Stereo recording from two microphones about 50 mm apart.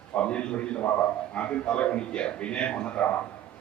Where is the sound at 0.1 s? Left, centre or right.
Left.